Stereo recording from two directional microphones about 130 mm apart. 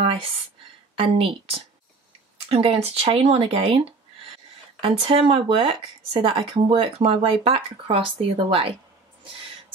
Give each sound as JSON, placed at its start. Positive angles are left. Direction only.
{"t": 0.0, "sound": "a sound", "side_deg": -45}
{"t": 0.9, "sound": "speech", "side_deg": -45}
{"t": 4.8, "sound": "speech", "side_deg": -45}